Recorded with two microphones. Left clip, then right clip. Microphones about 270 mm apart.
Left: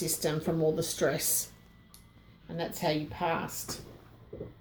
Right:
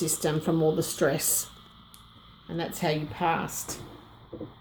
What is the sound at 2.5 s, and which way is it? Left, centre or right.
Speech, right.